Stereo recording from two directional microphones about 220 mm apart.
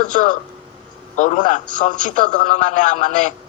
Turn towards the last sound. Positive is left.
turn(degrees=35)  # may be behind; listen again after turning